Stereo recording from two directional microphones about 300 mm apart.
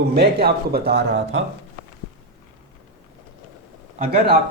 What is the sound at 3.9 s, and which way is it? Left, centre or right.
Speech, right.